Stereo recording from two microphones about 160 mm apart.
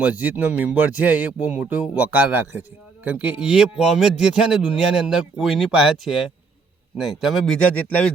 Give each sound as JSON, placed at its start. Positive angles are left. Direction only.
{"t": 0.0, "sound": "speech", "side_deg": -10}